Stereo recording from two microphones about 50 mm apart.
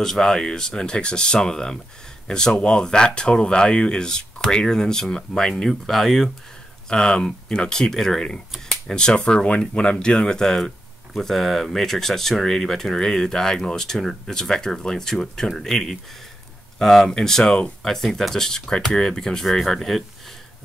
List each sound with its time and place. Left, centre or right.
0.0 s speech: centre
6.9 s speech: centre